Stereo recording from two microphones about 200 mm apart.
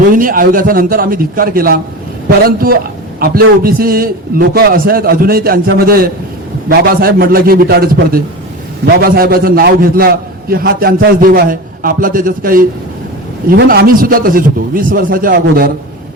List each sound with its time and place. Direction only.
0.1 s a man's voice: 45° right (ahead or behind)